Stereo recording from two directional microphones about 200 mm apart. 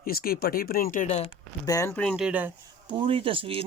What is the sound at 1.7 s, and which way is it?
Speech, 15° left (ahead or behind).